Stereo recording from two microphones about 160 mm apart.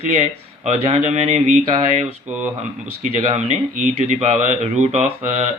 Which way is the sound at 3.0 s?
45° right (ahead or behind).